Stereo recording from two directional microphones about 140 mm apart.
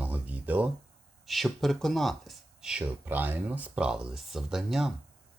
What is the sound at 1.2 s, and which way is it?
Speech, centre (ahead or behind).